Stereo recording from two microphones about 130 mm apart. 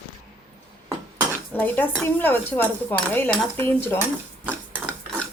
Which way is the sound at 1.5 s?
15° left (ahead or behind).